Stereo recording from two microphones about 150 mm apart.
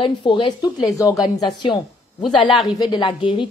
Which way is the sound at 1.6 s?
30° left (ahead or behind).